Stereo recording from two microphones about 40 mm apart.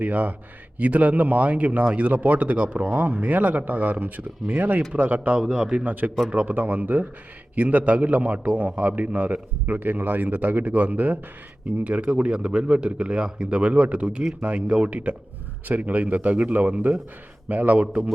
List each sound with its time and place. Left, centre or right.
0.0 s a man's voice: right
11.8 s a man's voice: right